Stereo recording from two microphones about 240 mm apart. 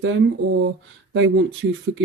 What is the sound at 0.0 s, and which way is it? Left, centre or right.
Speech, right.